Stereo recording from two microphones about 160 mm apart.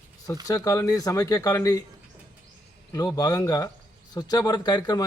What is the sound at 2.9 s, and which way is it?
Speech, 20° left (ahead or behind).